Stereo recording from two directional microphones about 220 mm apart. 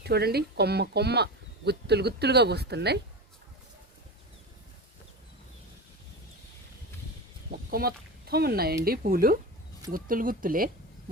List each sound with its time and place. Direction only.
0.0 s speech: 45° right (ahead or behind)
7.7 s speech: 45° right (ahead or behind)